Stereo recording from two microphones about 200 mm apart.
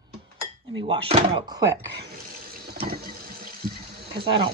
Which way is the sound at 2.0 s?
45° right (ahead or behind).